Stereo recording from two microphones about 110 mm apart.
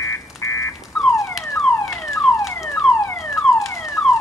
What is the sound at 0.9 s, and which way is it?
Car alarm, 5° left (ahead or behind).